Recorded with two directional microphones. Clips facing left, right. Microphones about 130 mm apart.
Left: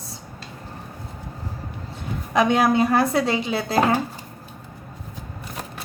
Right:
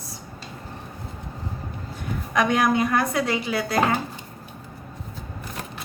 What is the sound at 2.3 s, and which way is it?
A woman's voice, 30° left (ahead or behind).